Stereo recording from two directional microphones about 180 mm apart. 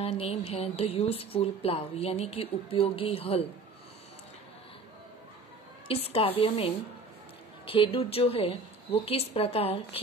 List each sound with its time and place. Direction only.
0.0 s a woman's voice: 35° left (ahead or behind)
5.9 s a woman's voice: 35° left (ahead or behind)